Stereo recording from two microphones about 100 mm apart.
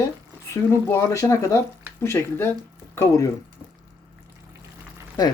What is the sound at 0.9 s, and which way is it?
Speech, 30° left (ahead or behind).